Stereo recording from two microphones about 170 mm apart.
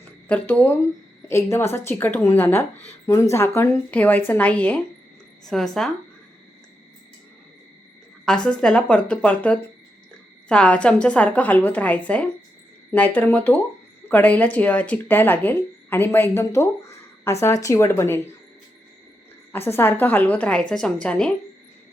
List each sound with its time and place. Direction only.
0.0 s speech: 10° left (ahead or behind)
8.4 s speech: 5° left (ahead or behind)
19.5 s speech: 15° left (ahead or behind)